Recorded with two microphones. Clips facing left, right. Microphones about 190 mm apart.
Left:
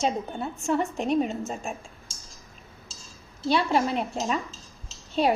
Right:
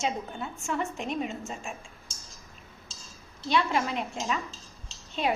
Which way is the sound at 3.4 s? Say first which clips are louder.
Left 3 dB; 35° left (ahead or behind).